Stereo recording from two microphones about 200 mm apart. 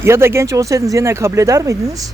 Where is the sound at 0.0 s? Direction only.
10° right (ahead or behind).